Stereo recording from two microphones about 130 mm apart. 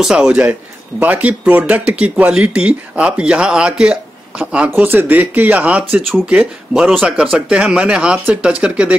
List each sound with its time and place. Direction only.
0.0 s a man's voice: 5° right (ahead or behind)